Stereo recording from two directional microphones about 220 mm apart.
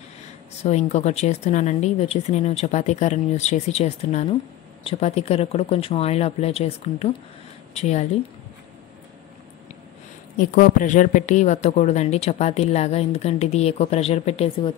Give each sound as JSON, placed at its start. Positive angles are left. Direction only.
{"t": 0.7, "sound": "speech", "side_deg": 30}
{"t": 10.3, "sound": "speech", "side_deg": 35}